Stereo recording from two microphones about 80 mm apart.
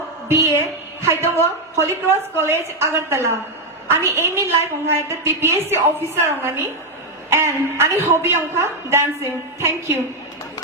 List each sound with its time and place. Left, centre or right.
0.3 s a woman's voice: right
0.6 s music: right
1.7 s a woman's voice: right